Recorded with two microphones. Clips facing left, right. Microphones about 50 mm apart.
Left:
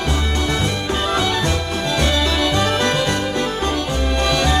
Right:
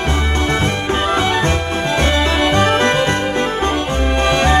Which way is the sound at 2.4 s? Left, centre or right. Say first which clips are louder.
Right 4 dB; right.